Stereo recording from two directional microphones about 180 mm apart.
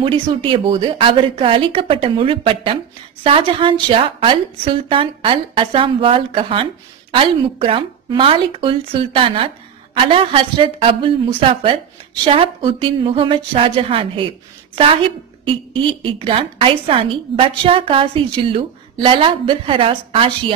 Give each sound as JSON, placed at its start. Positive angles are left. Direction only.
{"t": 0.0, "sound": "a woman's voice", "side_deg": -30}